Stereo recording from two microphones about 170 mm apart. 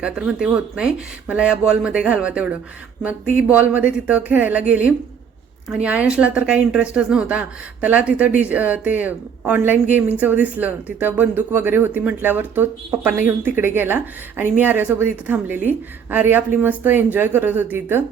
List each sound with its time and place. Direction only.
0.0 s speech: 5° right (ahead or behind)